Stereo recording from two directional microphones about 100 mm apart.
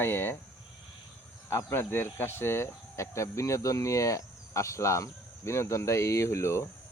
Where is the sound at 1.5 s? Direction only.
25° left (ahead or behind).